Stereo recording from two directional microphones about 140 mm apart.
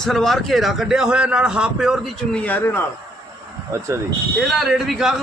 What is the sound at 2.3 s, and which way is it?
Speech, 10° left (ahead or behind).